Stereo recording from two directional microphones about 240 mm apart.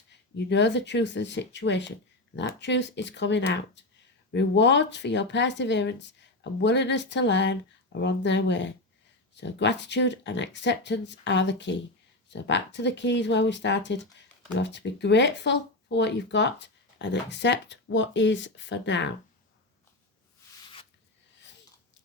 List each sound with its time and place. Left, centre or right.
0.1 s speech: left